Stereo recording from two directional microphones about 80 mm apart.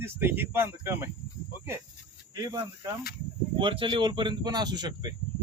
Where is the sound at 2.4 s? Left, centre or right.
Right.